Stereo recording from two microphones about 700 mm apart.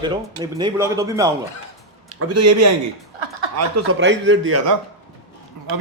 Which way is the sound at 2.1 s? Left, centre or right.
Right.